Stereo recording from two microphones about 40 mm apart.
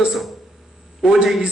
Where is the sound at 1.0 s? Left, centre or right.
Centre.